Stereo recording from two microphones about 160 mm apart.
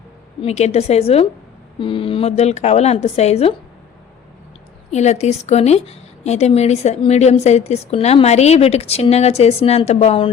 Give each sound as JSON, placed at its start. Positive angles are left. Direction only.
{"t": 0.4, "sound": "a woman's voice", "side_deg": 45}
{"t": 4.9, "sound": "a woman's voice", "side_deg": 45}